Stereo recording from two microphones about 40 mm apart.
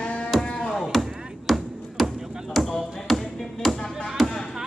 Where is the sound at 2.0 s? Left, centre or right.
Centre.